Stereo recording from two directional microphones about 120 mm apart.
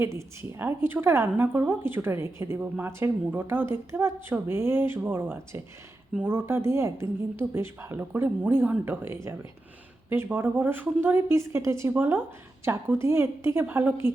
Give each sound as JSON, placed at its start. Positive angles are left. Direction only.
{"t": 0.0, "sound": "a woman's voice", "side_deg": -20}